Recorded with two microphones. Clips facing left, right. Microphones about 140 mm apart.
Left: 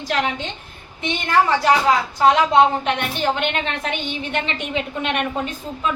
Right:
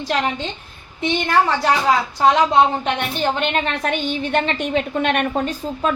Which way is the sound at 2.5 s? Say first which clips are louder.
Left 1 dB; 35° right (ahead or behind).